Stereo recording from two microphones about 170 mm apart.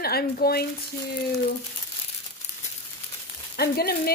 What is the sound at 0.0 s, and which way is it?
Speech, 65° left (ahead or behind).